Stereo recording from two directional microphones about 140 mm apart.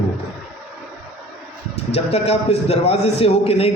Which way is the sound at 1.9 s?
50° left (ahead or behind).